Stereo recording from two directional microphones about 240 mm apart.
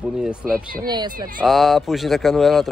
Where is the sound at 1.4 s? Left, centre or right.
Centre.